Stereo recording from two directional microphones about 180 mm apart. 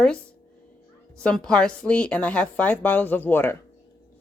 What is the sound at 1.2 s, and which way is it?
A woman's voice, 5° left (ahead or behind).